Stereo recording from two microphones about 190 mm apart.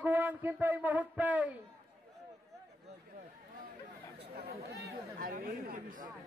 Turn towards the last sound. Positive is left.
turn(degrees=-45)  # may be behind; listen again after turning